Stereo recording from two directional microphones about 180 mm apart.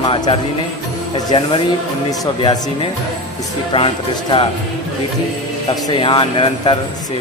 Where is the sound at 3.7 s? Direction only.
30° left (ahead or behind).